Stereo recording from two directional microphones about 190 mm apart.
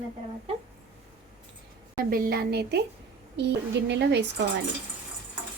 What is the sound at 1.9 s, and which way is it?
A woman's voice, 50° right (ahead or behind).